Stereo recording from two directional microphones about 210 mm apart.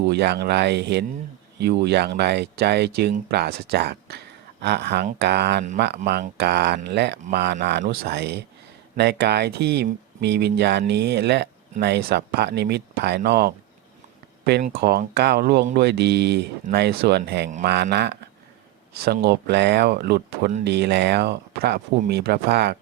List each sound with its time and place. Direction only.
0.0 s speech: 50° right (ahead or behind)
14.8 s speech: 50° right (ahead or behind)
20.7 s speech: 55° right (ahead or behind)